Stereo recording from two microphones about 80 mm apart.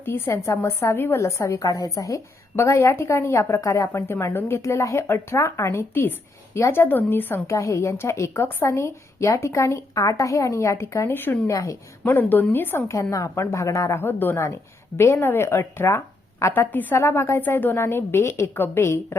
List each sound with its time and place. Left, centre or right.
0.3 s a woman's voice: left
7.4 s a woman's voice: left
11.5 s a woman's voice: left
12.0 s a woman's voice: left
12.9 s a woman's voice: left
14.0 s a woman's voice: left